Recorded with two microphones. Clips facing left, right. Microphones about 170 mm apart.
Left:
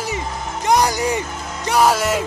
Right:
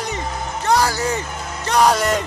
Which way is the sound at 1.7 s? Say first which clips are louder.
Even; 5° left (ahead or behind).